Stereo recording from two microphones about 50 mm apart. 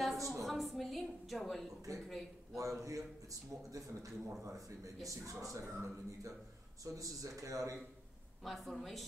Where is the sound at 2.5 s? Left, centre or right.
Right.